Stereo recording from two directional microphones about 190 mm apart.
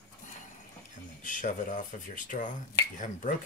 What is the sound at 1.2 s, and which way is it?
Speech, 45° left (ahead or behind).